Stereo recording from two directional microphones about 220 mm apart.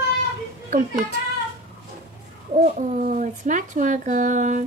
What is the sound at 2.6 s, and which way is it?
Speech, 35° right (ahead or behind).